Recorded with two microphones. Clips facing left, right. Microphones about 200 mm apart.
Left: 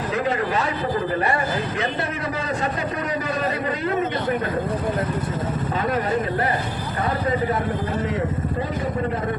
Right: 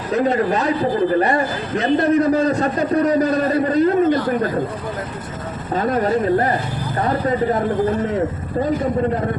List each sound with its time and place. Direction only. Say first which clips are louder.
2.0 s a man's voice: right 12 dB; 40° right (ahead or behind)